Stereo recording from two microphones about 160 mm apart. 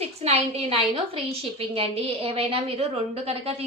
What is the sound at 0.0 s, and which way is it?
A woman's voice, 40° right (ahead or behind).